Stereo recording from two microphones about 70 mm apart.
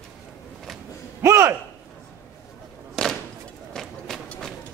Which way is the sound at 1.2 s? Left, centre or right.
Right.